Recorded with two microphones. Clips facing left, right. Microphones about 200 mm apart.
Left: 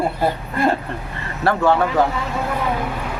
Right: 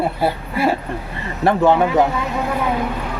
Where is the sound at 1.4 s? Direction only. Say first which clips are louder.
Right 3 dB; 20° right (ahead or behind).